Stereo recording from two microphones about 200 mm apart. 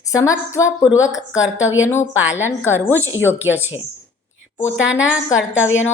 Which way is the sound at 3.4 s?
10° right (ahead or behind).